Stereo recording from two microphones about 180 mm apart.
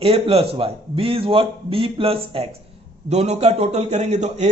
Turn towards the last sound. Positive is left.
turn(degrees=-40)  # may be behind; listen again after turning